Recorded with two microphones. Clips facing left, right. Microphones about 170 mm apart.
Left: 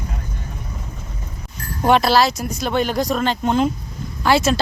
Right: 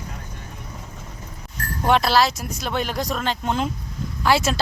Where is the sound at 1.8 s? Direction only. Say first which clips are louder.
Left 3 dB; centre (ahead or behind).